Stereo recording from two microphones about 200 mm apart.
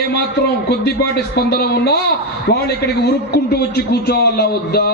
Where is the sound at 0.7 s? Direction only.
55° left (ahead or behind).